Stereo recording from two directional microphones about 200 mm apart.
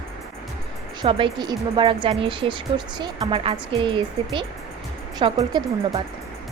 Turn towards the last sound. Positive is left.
turn(degrees=-20)  # may be behind; listen again after turning